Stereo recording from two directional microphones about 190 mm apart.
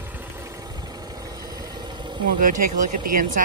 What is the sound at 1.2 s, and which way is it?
Vehicle, 20° right (ahead or behind).